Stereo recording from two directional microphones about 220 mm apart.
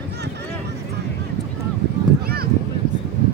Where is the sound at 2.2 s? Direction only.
45° right (ahead or behind).